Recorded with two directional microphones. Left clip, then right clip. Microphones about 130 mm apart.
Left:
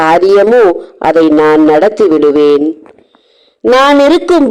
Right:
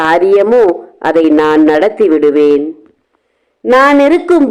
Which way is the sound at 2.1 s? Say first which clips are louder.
Left 1 dB; 40° left (ahead or behind).